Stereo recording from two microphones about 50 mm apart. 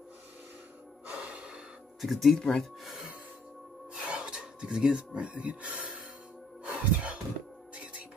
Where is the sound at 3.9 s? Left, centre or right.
Right.